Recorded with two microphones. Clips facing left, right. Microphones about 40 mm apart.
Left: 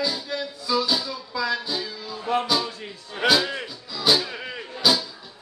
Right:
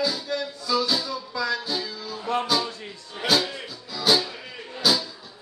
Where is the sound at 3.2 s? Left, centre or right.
Left.